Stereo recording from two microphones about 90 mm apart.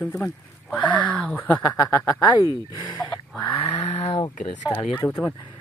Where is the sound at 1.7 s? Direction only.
40° left (ahead or behind).